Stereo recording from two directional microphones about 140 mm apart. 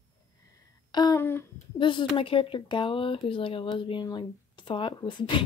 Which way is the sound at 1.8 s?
35° left (ahead or behind).